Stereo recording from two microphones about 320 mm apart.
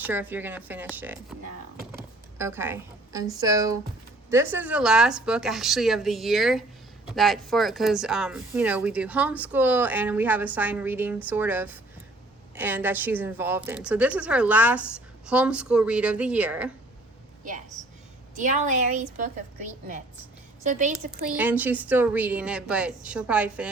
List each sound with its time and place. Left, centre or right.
0.0 s a woman's voice: centre
18.3 s a woman's voice: right
20.7 s a woman's voice: right
20.9 s speech: centre